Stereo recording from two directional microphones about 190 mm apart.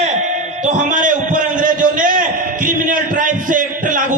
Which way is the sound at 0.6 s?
40° right (ahead or behind).